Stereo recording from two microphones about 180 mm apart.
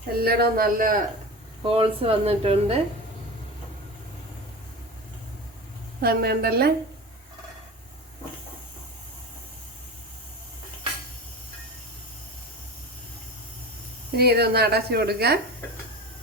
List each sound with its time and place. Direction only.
0.1 s a woman's voice: 60° right (ahead or behind)
1.6 s a woman's voice: 30° right (ahead or behind)
6.0 s a woman's voice: 60° right (ahead or behind)
14.2 s a woman's voice: 60° right (ahead or behind)